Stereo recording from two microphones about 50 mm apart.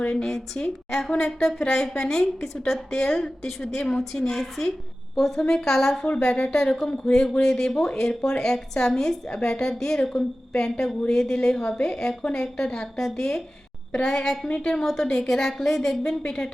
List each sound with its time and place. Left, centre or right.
0.1 s a woman's voice: centre
5.4 s speech: centre
5.6 s speech: centre